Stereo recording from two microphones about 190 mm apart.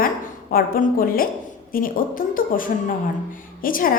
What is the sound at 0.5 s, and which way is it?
A woman's voice, 50° left (ahead or behind).